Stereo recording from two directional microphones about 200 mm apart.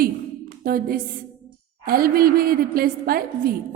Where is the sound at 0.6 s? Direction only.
50° right (ahead or behind).